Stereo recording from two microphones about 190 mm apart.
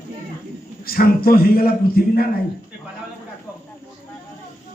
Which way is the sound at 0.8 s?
50° left (ahead or behind).